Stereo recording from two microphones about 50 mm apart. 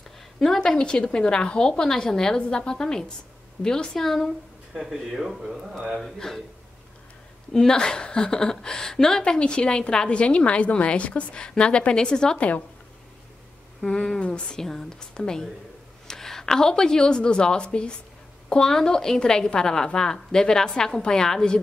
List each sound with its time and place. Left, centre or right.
0.4 s a woman's voice: centre
4.7 s speech: centre
6.1 s a woman's voice: centre
7.5 s a woman's voice: centre
12.4 s speech: left
13.8 s a woman's voice: centre
14.6 s a woman's voice: centre